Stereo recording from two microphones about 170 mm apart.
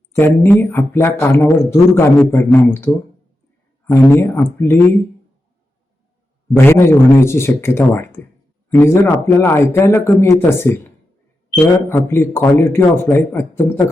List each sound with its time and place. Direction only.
0.1 s a man's voice: 15° left (ahead or behind)
6.6 s a man's voice: 15° left (ahead or behind)